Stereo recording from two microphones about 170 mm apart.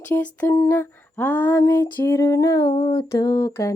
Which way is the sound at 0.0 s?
10° left (ahead or behind).